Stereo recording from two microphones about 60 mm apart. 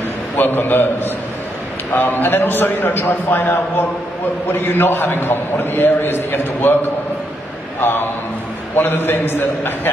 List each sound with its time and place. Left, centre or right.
0.4 s a man's voice: left
7.8 s a man's voice: left